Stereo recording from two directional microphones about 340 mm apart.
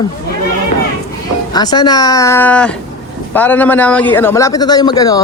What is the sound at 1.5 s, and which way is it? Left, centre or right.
A man's voice, centre.